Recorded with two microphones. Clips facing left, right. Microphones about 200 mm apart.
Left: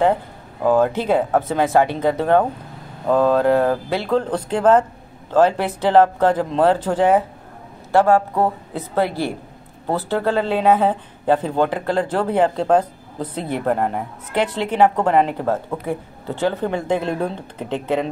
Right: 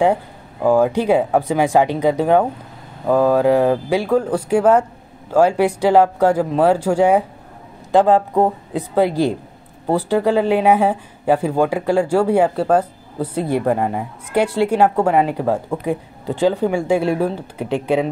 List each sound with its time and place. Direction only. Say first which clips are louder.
0.7 s speech: right 2 dB; 10° right (ahead or behind)